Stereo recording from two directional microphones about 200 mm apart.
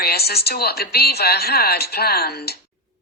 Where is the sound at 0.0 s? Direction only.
50° left (ahead or behind).